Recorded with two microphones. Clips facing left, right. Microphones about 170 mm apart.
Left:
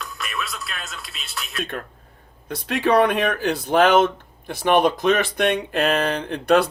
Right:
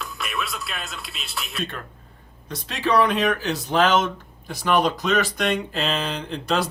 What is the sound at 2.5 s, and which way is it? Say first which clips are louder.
Speech: left 3 dB; 55° left (ahead or behind).